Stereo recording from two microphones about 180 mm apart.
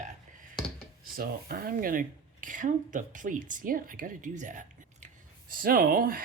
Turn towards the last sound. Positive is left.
turn(degrees=-55)  # may be behind; listen again after turning